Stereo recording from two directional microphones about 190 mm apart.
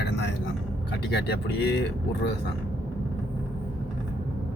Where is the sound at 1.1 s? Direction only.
60° left (ahead or behind).